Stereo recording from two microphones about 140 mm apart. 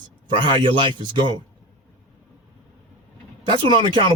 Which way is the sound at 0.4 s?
35° right (ahead or behind).